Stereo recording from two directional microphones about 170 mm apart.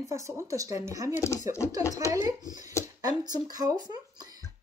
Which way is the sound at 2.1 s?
20° right (ahead or behind).